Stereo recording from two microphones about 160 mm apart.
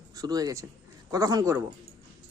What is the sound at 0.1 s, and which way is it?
Speech, 20° right (ahead or behind).